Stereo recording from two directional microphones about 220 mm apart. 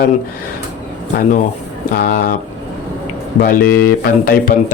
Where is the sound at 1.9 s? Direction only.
40° left (ahead or behind).